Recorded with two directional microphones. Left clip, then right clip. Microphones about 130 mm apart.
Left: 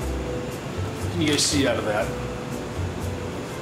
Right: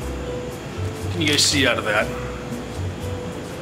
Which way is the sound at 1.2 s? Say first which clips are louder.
Right 4 dB; 15° right (ahead or behind).